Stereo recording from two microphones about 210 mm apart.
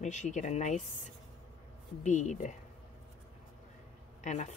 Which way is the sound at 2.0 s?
35° left (ahead or behind).